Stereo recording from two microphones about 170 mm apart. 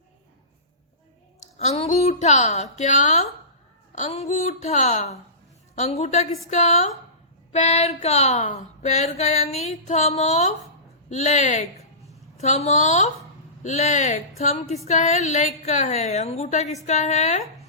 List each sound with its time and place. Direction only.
1.5 s speech: 35° left (ahead or behind)